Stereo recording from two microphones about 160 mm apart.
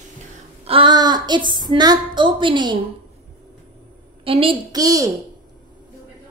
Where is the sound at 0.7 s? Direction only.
30° right (ahead or behind).